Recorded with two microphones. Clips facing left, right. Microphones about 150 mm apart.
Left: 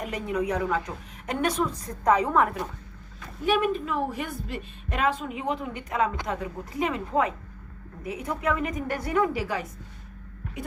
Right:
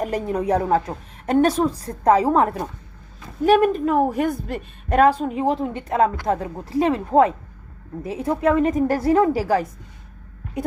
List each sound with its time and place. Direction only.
0.0 s a woman's voice: 35° right (ahead or behind)
3.4 s a woman's voice: 45° right (ahead or behind)